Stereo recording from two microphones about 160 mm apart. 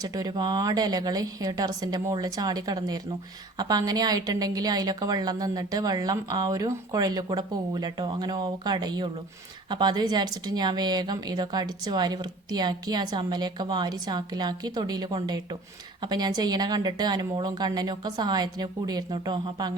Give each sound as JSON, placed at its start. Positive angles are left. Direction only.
{"t": 0.0, "sound": "a woman's voice", "side_deg": -25}